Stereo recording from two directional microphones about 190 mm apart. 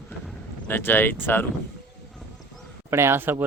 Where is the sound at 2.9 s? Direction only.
15° right (ahead or behind).